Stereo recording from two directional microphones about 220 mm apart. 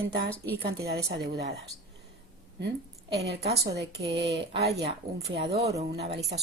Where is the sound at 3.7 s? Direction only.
50° right (ahead or behind).